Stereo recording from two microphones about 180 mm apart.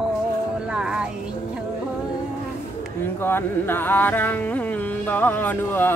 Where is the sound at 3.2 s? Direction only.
10° left (ahead or behind).